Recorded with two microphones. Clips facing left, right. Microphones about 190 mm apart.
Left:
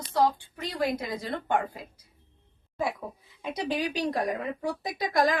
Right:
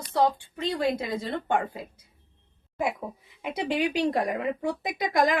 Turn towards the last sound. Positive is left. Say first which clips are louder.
# right 1 dB
turn(degrees=-20)  # may be behind; listen again after turning